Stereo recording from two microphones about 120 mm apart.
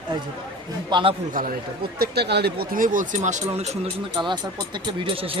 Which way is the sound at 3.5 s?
65° right (ahead or behind).